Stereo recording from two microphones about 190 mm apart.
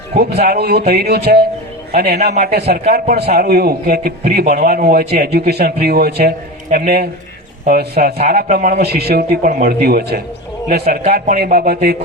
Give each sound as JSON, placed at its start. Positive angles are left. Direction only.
{"t": 0.2, "sound": "a man's voice", "side_deg": -55}